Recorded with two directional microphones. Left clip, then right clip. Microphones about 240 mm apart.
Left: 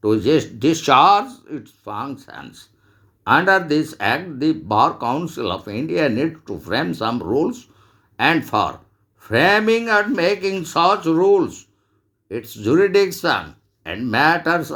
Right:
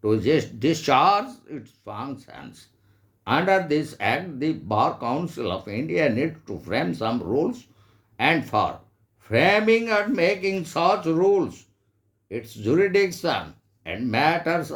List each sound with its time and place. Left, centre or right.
0.0 s speech: centre